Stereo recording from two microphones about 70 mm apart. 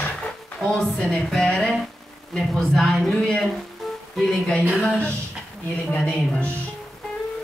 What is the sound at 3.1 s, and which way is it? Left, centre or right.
Speech, centre.